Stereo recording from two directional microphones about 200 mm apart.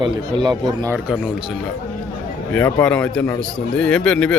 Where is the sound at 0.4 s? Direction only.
20° right (ahead or behind).